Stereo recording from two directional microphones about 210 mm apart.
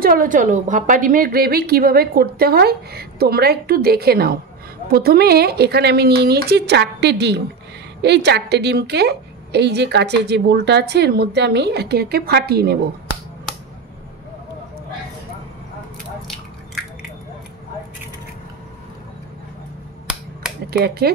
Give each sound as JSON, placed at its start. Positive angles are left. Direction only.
{"t": 0.0, "sound": "a woman's voice", "side_deg": -40}
{"t": 20.7, "sound": "a woman's voice", "side_deg": -50}